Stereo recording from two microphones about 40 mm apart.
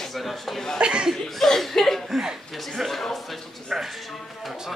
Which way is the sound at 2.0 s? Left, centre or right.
Centre.